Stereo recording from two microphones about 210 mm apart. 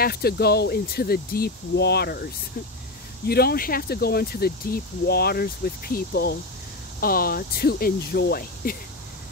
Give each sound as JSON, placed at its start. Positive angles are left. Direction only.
{"t": 0.0, "sound": "speech", "side_deg": 45}
{"t": 3.3, "sound": "speech", "side_deg": 45}